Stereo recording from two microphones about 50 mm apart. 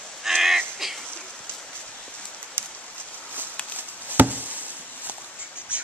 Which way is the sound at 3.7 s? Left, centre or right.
Right.